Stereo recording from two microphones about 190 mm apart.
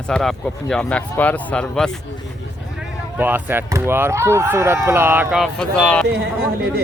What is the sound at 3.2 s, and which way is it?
Speech, 10° right (ahead or behind).